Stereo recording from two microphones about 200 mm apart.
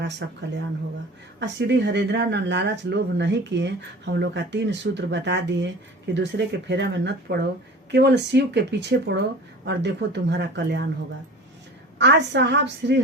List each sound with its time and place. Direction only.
0.2 s speech: 60° right (ahead or behind)
1.4 s speech: 60° right (ahead or behind)
11.9 s speech: 60° right (ahead or behind)